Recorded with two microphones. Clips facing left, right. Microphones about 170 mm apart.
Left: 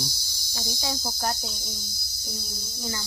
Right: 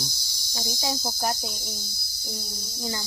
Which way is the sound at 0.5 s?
20° right (ahead or behind).